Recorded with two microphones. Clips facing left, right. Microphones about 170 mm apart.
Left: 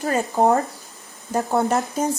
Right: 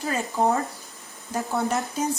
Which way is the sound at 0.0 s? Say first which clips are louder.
Left 5 dB; 50° left (ahead or behind).